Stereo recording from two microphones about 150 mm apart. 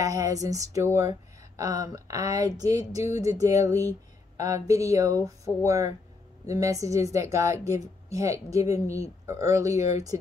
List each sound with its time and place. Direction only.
0.0 s speech: 20° right (ahead or behind)